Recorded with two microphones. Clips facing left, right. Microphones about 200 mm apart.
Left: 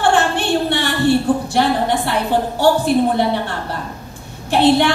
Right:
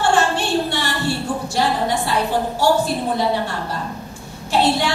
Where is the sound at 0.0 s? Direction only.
60° left (ahead or behind).